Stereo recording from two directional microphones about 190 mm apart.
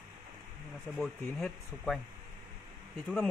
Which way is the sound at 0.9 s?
Centre (ahead or behind).